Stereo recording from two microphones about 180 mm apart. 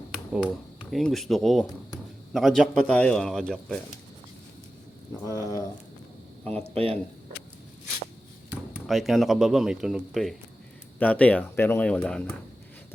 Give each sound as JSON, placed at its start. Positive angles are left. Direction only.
{"t": 0.4, "sound": "speech", "side_deg": 5}
{"t": 5.2, "sound": "speech", "side_deg": 20}
{"t": 6.7, "sound": "speech", "side_deg": -30}
{"t": 8.7, "sound": "speech", "side_deg": 0}